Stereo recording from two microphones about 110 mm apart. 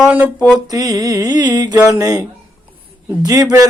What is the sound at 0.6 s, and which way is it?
Mantra, 35° right (ahead or behind).